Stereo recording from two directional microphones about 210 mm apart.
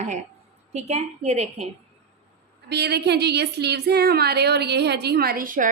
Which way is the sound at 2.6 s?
50° right (ahead or behind).